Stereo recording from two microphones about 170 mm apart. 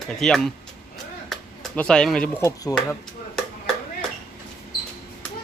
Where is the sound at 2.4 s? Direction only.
15° left (ahead or behind).